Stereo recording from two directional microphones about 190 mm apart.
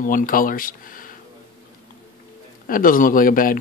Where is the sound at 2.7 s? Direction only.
45° left (ahead or behind).